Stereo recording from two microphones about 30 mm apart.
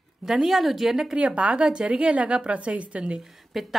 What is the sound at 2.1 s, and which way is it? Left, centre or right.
A woman's voice, right.